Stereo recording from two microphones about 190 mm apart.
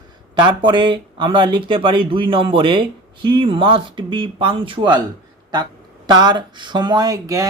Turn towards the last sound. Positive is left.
turn(degrees=-15)  # may be behind; listen again after turning